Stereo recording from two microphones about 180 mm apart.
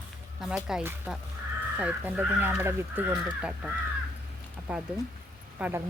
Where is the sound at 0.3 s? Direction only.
5° right (ahead or behind).